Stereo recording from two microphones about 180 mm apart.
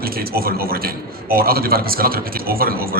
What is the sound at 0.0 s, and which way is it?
A man's voice, 55° right (ahead or behind).